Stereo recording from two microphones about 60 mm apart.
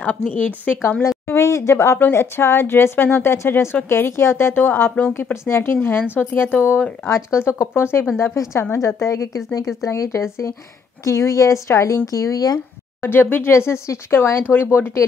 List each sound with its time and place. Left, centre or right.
0.3 s a woman's voice: left
1.0 s a woman's voice: left
7.1 s speech: left
8.7 s a woman's voice: left
10.2 s speech: left
11.1 s speech: left
13.0 s a woman's voice: left
13.5 s speech: left
14.4 s a woman's voice: left